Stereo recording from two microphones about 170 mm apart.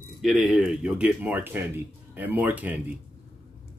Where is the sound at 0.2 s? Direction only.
Centre (ahead or behind).